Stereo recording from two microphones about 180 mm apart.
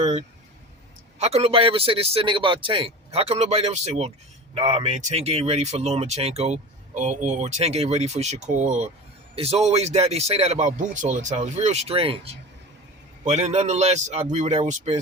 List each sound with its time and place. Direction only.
0.0 s speech: 35° right (ahead or behind)